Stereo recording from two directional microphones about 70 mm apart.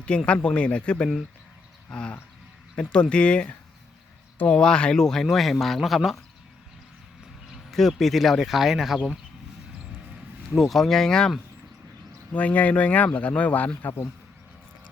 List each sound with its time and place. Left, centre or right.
0.1 s speech: centre
7.7 s speech: centre
10.5 s speech: centre
12.3 s speech: left